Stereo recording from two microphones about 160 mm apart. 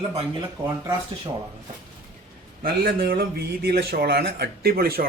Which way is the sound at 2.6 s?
70° right (ahead or behind).